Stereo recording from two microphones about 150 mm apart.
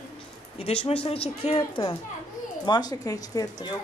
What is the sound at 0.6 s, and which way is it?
Speech, 40° left (ahead or behind).